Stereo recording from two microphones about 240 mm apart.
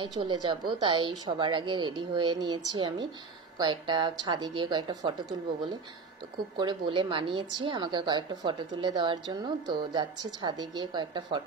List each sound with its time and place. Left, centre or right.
0.2 s a woman's voice: centre
6.5 s a woman's voice: centre